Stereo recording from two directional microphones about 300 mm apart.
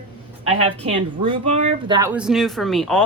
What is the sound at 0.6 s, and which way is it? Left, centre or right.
A woman's voice, centre.